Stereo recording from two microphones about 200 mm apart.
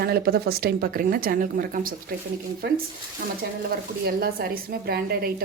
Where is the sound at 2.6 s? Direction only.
55° right (ahead or behind).